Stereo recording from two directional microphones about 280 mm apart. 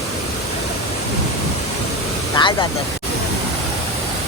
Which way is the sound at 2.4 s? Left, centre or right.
Centre.